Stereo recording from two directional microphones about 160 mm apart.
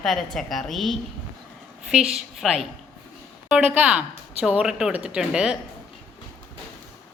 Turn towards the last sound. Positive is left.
turn(degrees=-5)  # may be behind; listen again after turning